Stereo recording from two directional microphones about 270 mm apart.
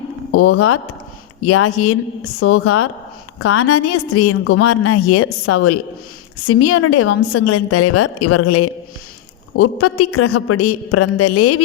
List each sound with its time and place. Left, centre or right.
0.3 s a woman's voice: left